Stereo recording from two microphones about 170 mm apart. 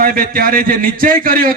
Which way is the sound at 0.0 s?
55° right (ahead or behind).